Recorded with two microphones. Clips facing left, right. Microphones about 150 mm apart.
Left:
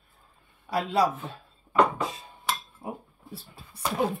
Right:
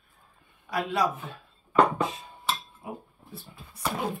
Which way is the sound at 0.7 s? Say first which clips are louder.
Left 3 dB; 30° left (ahead or behind).